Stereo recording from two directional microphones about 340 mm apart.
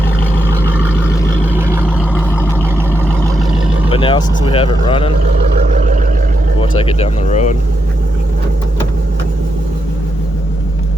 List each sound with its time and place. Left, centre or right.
1.5 s vehicle: centre
3.8 s speech: centre
5.6 s vehicle: right
6.6 s speech: centre